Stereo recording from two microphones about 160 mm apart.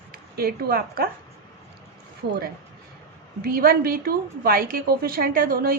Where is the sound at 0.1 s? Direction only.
70° right (ahead or behind).